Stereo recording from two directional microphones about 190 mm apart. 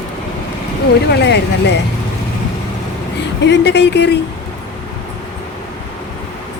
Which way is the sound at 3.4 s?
65° left (ahead or behind).